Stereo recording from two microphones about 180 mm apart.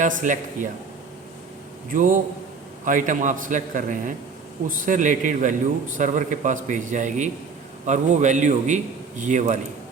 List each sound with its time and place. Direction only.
0.0 s a man's voice: 45° right (ahead or behind)
1.9 s a man's voice: 45° right (ahead or behind)